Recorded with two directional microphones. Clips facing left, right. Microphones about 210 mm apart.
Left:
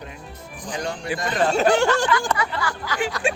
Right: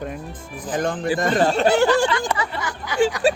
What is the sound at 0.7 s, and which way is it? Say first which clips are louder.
Speech: right 5 dB; 50° right (ahead or behind).